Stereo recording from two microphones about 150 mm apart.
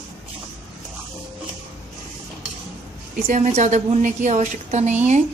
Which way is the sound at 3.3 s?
50° right (ahead or behind).